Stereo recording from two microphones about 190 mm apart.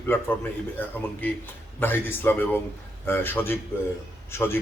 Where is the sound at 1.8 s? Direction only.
10° left (ahead or behind).